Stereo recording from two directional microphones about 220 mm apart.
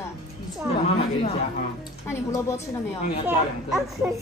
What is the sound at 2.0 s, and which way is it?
Speech, 10° left (ahead or behind).